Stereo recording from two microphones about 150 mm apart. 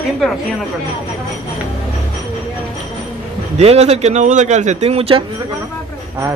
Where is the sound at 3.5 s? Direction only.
45° right (ahead or behind).